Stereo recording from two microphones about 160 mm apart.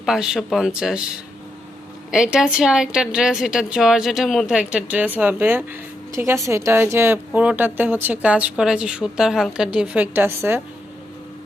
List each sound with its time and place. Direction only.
0.0 s a woman's voice: 5° right (ahead or behind)